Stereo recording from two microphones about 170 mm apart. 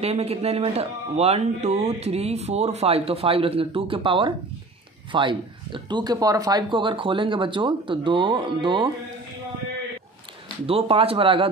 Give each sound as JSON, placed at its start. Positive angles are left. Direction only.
{"t": 0.0, "sound": "speech", "side_deg": -40}
{"t": 10.7, "sound": "speech", "side_deg": -35}